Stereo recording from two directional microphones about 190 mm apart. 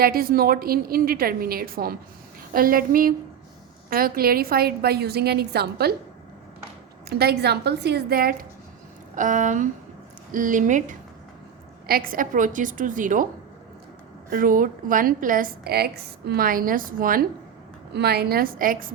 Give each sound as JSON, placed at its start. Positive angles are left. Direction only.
{"t": 0.0, "sound": "a woman's voice", "side_deg": -50}
{"t": 7.1, "sound": "a woman's voice", "side_deg": -55}
{"t": 14.3, "sound": "a woman's voice", "side_deg": -50}
{"t": 17.9, "sound": "a woman's voice", "side_deg": -60}